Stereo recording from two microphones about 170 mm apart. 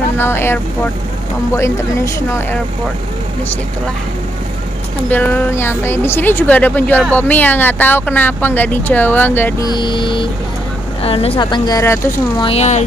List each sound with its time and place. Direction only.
0.2 s speech: 15° left (ahead or behind)
1.6 s speech: 15° left (ahead or behind)
5.1 s speech: 10° left (ahead or behind)
9.7 s speech: 25° left (ahead or behind)
12.4 s speech: 35° left (ahead or behind)